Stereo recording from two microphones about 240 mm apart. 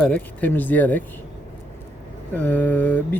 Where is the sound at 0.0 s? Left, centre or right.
Centre.